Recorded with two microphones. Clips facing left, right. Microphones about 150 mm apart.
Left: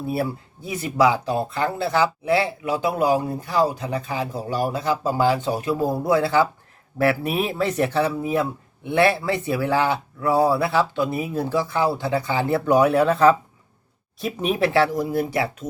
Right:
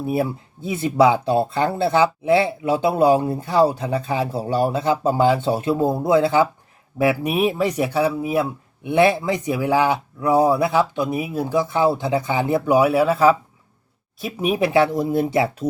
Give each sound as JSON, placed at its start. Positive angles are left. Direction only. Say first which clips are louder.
{"t": 0.0, "sound": "speech", "louder": "right 3 dB", "side_deg": -20}
{"t": 14.5, "sound": "speech", "louder": "right 2 dB", "side_deg": -15}